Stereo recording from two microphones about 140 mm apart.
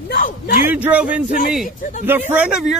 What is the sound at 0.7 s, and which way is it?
Speech, 10° right (ahead or behind).